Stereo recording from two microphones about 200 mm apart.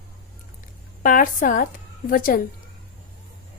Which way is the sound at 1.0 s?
45° left (ahead or behind).